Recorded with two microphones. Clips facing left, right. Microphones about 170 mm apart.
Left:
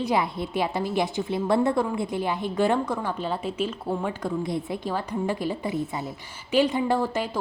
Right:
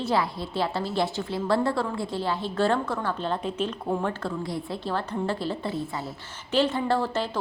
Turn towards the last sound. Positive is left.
turn(degrees=10)  # may be behind; listen again after turning